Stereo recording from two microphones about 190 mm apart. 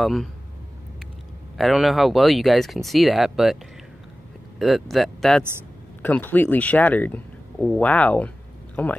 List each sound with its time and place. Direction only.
0.0 s speech: centre (ahead or behind)
1.6 s speech: centre (ahead or behind)
4.6 s speech: centre (ahead or behind)